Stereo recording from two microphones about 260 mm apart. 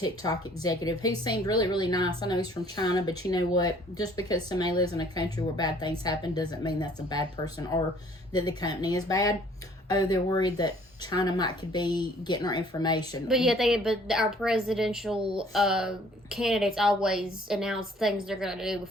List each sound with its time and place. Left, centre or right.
0.0 s speech: centre
13.2 s speech: centre